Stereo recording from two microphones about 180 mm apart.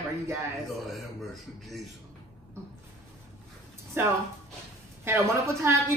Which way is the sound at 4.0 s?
10° right (ahead or behind).